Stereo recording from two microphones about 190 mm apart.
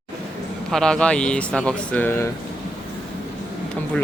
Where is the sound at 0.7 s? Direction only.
5° left (ahead or behind).